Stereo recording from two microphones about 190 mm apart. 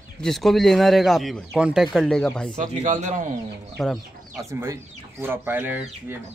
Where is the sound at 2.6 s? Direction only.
40° right (ahead or behind).